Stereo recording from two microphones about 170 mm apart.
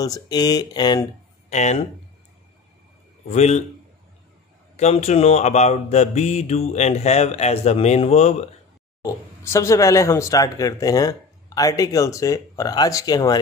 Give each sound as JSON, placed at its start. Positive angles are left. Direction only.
{"t": 0.0, "sound": "speech", "side_deg": 20}
{"t": 1.5, "sound": "speech", "side_deg": 45}
{"t": 3.3, "sound": "speech", "side_deg": 40}
{"t": 4.7, "sound": "speech", "side_deg": 40}
{"t": 9.0, "sound": "speech", "side_deg": 15}